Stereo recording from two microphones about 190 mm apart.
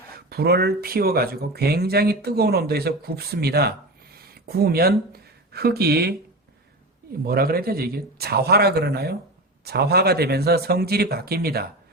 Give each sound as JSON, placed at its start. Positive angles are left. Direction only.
{"t": 0.3, "sound": "speech", "side_deg": -55}
{"t": 7.3, "sound": "speech", "side_deg": -50}